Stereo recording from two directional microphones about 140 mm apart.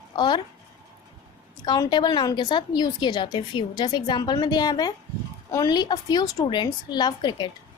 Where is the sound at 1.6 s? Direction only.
30° left (ahead or behind).